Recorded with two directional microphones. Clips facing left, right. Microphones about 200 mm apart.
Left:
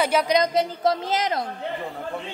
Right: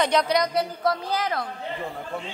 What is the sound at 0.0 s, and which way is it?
Speech, 5° left (ahead or behind).